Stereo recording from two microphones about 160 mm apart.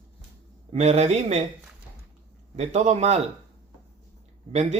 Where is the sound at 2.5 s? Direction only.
45° right (ahead or behind).